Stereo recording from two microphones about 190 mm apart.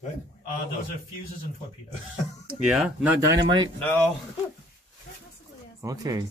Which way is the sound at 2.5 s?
5° right (ahead or behind).